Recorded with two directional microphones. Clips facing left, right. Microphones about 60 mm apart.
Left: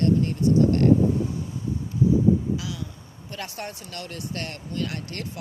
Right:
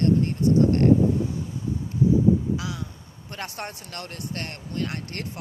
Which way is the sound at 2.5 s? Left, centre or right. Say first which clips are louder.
Right 1 dB; right.